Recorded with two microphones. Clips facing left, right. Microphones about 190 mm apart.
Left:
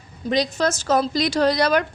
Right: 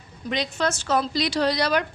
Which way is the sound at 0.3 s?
40° left (ahead or behind).